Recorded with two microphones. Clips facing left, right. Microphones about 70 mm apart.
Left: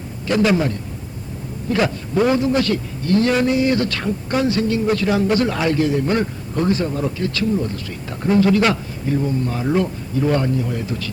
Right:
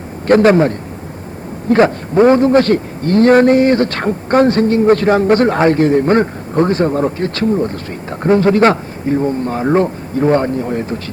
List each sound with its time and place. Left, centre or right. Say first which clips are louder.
0.3 s a man's voice: right 8 dB; right